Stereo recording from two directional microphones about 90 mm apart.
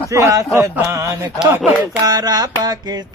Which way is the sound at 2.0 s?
45° right (ahead or behind).